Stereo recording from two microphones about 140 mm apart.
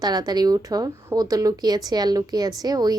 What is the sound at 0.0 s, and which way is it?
Speech, 30° right (ahead or behind).